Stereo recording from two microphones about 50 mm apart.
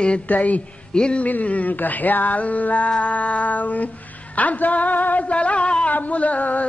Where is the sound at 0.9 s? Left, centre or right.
Centre.